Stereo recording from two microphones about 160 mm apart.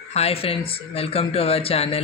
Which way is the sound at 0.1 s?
40° left (ahead or behind).